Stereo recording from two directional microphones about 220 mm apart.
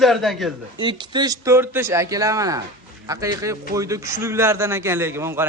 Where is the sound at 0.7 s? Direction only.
20° right (ahead or behind).